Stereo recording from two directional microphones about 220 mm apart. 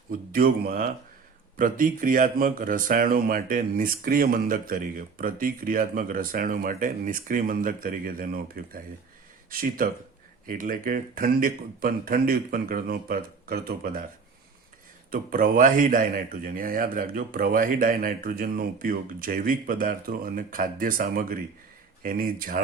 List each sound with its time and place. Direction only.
0.1 s speech: 40° right (ahead or behind)
15.1 s speech: 40° right (ahead or behind)